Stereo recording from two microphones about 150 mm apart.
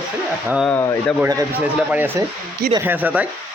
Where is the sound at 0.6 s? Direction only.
10° left (ahead or behind).